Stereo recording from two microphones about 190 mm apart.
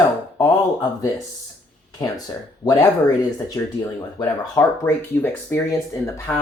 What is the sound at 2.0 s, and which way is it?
Speech, 20° left (ahead or behind).